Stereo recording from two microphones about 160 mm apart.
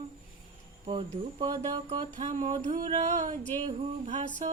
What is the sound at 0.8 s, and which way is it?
Speech, 35° right (ahead or behind).